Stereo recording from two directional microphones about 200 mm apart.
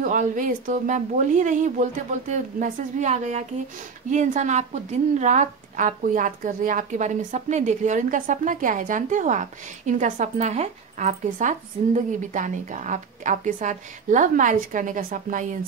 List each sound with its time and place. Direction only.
0.0 s speech: 40° right (ahead or behind)